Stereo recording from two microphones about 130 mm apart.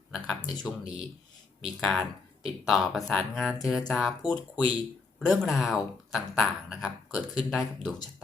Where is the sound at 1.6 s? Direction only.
Centre (ahead or behind).